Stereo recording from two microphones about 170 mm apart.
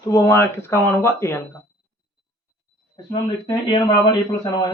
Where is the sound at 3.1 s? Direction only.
25° left (ahead or behind).